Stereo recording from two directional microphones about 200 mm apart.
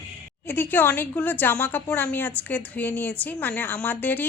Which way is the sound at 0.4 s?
10° left (ahead or behind).